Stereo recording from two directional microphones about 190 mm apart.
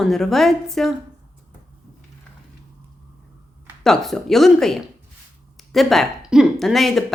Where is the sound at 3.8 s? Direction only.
Centre (ahead or behind).